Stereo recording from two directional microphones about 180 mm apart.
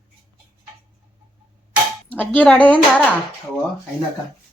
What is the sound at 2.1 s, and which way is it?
Speech, 10° left (ahead or behind).